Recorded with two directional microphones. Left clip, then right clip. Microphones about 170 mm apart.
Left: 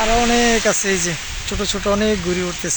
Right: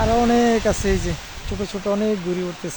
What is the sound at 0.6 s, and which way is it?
Speech, 5° right (ahead or behind).